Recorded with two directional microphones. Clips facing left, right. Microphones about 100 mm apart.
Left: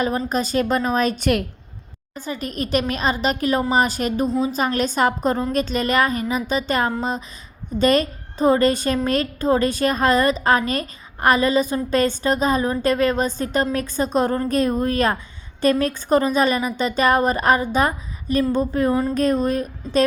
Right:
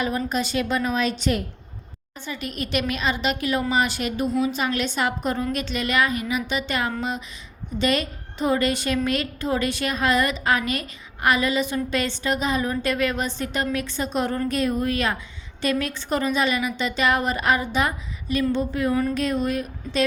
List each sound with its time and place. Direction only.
0.3 s a woman's voice: 40° left (ahead or behind)